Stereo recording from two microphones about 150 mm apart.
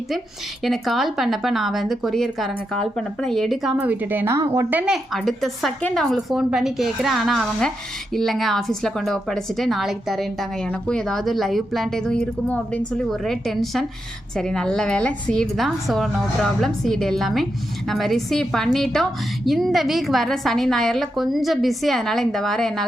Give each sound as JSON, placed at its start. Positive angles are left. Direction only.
{"t": 0.6, "sound": "speech", "side_deg": 0}
{"t": 5.1, "sound": "a woman's voice", "side_deg": 0}